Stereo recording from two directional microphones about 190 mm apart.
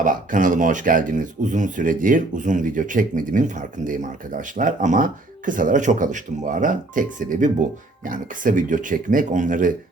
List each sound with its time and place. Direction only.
0.0 s speech: 45° right (ahead or behind)